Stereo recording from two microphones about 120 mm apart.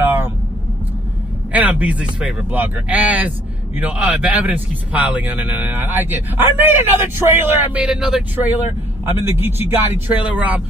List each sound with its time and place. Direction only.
0.0 s vehicle: 15° right (ahead or behind)
1.5 s speech: 10° right (ahead or behind)
7.8 s speech: 5° right (ahead or behind)
9.0 s speech: 20° right (ahead or behind)